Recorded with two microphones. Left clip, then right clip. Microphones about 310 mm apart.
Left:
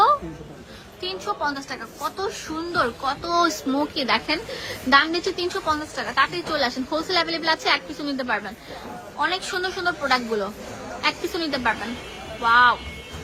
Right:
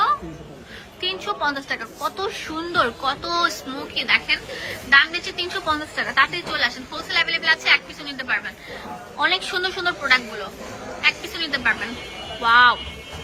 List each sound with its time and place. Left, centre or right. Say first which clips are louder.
1.0 s a woman's voice: right 3 dB; centre